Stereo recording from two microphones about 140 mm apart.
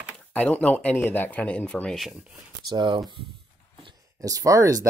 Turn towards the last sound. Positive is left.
turn(degrees=-25)  # may be behind; listen again after turning